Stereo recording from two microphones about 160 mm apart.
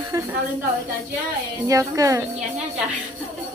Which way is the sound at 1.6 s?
20° right (ahead or behind).